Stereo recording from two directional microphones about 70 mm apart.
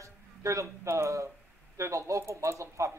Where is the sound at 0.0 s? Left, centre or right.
Right.